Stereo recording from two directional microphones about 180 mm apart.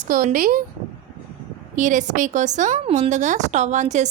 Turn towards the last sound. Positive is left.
turn(degrees=-40)  # may be behind; listen again after turning